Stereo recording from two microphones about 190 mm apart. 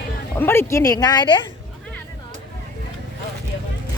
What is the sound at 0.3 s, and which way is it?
Speech, 10° left (ahead or behind).